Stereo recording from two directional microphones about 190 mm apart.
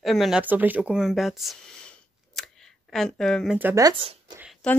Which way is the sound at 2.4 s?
Centre (ahead or behind).